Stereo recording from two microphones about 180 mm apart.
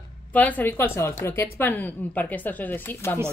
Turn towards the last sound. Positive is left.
turn(degrees=10)  # may be behind; listen again after turning